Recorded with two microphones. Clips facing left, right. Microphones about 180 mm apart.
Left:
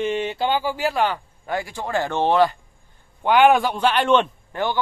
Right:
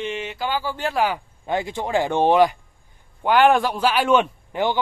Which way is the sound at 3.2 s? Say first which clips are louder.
Left 1 dB; centre (ahead or behind).